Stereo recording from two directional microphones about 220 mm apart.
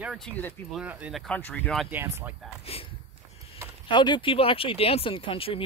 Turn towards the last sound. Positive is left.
turn(degrees=25)  # may be behind; listen again after turning